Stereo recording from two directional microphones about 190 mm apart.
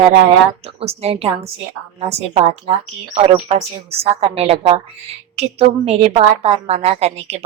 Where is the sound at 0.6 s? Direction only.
30° right (ahead or behind).